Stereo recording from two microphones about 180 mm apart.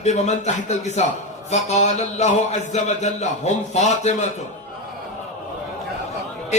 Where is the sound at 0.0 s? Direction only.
40° left (ahead or behind).